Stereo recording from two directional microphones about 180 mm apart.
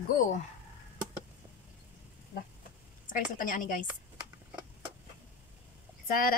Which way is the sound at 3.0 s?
50° left (ahead or behind).